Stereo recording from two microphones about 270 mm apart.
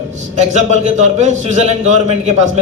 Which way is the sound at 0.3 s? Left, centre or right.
Right.